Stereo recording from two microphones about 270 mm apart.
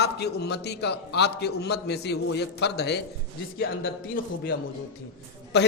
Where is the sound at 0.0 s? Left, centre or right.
Left.